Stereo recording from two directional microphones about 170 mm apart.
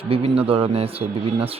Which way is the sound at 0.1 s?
35° right (ahead or behind).